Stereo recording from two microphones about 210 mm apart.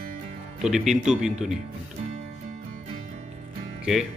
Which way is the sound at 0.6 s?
Centre (ahead or behind).